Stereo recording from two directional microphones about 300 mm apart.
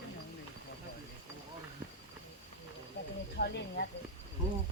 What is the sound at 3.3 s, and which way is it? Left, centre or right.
Cricket, left.